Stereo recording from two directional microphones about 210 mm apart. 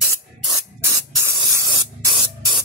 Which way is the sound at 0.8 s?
15° right (ahead or behind).